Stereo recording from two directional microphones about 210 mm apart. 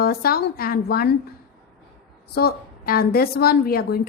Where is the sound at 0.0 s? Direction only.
45° left (ahead or behind).